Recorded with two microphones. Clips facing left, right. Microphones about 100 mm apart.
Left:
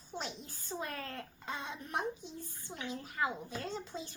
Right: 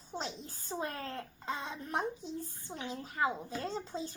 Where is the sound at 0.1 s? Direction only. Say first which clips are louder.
Right 2 dB; 25° right (ahead or behind).